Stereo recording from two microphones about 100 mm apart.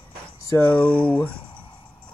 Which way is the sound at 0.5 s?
15° left (ahead or behind).